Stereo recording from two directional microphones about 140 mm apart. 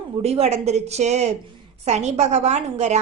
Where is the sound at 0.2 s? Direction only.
45° right (ahead or behind).